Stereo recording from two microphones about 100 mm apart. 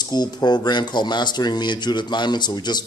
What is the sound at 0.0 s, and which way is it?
Speech, 45° left (ahead or behind).